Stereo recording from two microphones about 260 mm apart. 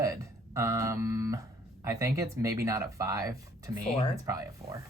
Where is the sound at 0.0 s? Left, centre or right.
Centre.